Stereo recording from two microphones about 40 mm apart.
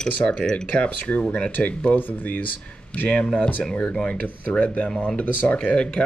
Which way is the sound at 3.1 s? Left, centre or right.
Left.